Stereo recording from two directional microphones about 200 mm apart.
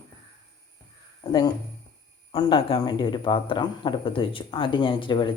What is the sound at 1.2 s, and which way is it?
Speech, 20° left (ahead or behind).